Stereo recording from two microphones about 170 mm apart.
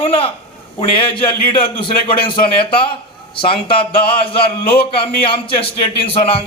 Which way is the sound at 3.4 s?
30° left (ahead or behind).